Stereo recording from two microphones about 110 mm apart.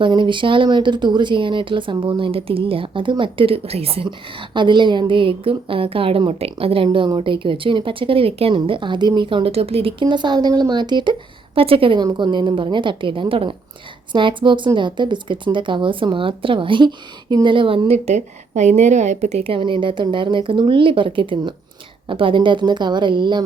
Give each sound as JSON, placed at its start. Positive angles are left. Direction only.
{"t": 0.0, "sound": "speech", "side_deg": -45}
{"t": 19.5, "sound": "speech", "side_deg": -50}